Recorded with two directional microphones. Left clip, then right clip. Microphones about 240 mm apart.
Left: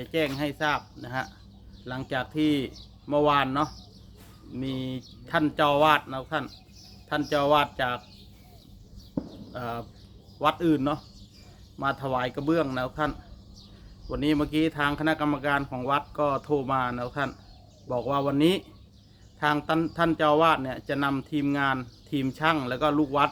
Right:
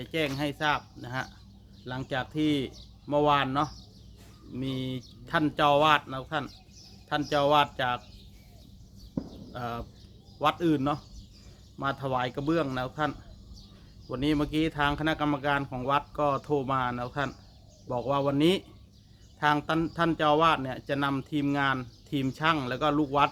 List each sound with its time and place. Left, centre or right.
0.0 s speech: centre
9.2 s horse: left
9.5 s speech: centre